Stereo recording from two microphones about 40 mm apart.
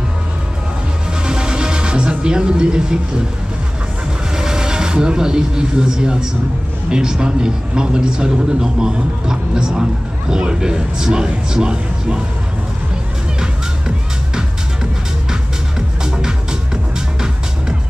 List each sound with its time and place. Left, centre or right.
1.2 s music: right
4.4 s speech: centre
13.4 s music: centre
16.0 s music: centre